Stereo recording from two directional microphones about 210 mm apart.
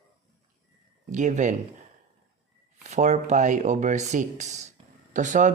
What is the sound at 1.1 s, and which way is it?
Speech, 35° right (ahead or behind).